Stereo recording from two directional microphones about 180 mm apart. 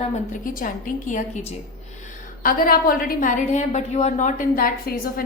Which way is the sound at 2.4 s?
55° left (ahead or behind).